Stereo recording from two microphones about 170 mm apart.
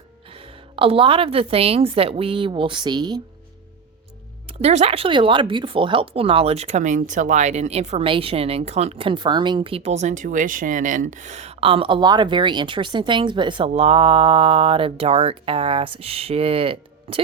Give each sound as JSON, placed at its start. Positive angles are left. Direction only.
{"t": 0.3, "sound": "speech", "side_deg": -35}
{"t": 4.4, "sound": "speech", "side_deg": -40}